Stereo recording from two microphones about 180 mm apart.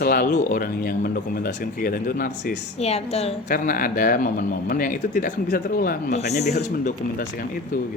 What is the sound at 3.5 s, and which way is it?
Speech, 50° left (ahead or behind).